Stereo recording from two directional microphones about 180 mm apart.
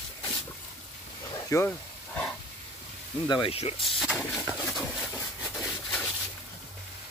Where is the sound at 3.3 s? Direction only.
30° left (ahead or behind).